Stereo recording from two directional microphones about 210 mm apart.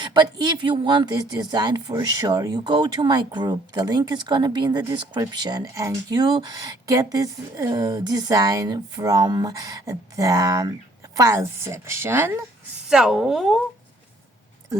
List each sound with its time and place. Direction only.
0.0 s speech: 20° right (ahead or behind); by 13.6 s centre (ahead or behind)